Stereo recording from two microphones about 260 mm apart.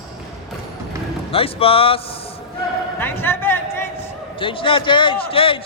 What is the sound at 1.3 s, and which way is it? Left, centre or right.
Speech, left.